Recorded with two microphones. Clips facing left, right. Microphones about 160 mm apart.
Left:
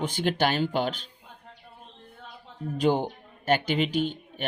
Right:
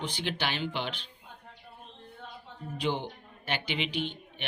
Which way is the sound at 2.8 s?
45° left (ahead or behind).